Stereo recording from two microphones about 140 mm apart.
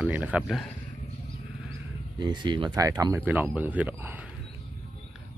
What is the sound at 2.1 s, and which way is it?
Speech, 30° right (ahead or behind).